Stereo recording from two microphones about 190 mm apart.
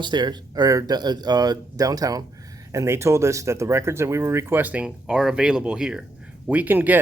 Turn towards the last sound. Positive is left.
turn(degrees=-10)  # may be behind; listen again after turning